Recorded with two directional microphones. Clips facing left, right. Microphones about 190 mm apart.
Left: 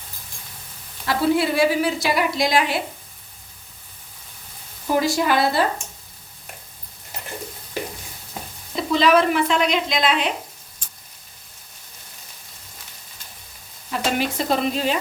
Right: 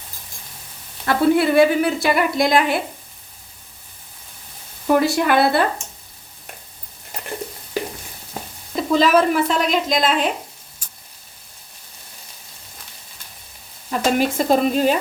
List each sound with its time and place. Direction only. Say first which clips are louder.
1.0 s a woman's voice: right 4 dB; 55° right (ahead or behind)
4.9 s speech: right 3 dB; 60° right (ahead or behind)
8.3 s stir: right 3 dB; 45° right (ahead or behind)
14.0 s a woman's voice: right 5 dB; 45° right (ahead or behind)